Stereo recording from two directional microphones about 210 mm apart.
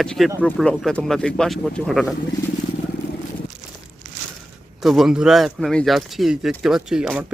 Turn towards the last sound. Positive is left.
turn(degrees=-5)  # may be behind; listen again after turning